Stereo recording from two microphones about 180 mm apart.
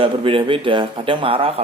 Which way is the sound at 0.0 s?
30° right (ahead or behind).